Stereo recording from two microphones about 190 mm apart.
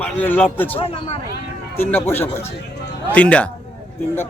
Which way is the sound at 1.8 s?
10° left (ahead or behind).